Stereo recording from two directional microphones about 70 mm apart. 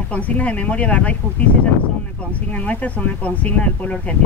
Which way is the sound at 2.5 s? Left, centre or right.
Left.